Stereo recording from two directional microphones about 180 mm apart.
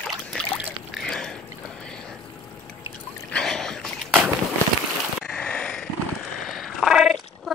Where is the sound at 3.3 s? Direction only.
Centre (ahead or behind).